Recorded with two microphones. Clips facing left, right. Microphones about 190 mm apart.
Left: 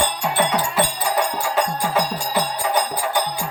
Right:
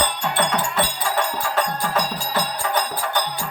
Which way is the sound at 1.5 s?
10° left (ahead or behind).